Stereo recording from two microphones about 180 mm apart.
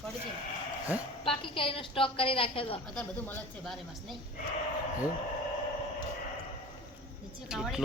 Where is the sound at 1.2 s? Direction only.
30° left (ahead or behind).